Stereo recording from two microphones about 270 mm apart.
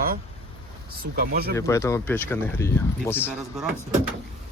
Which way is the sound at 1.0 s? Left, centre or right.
Right.